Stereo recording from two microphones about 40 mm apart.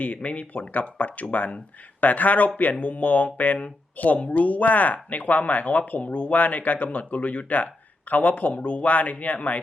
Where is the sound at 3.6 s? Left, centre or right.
Left.